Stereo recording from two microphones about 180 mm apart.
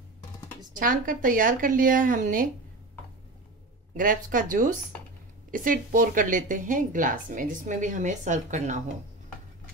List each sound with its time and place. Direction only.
0.7 s speech: 50° right (ahead or behind)
3.9 s speech: 50° right (ahead or behind)